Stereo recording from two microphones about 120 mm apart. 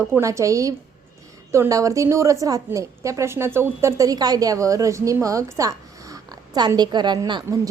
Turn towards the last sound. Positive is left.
turn(degrees=-30)  # may be behind; listen again after turning